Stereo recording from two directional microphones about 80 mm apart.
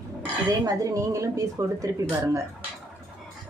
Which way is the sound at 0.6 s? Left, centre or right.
Right.